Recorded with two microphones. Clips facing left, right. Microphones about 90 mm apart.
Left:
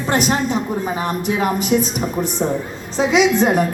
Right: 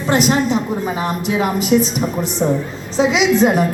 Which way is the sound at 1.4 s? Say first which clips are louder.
Right 3 dB; 45° left (ahead or behind).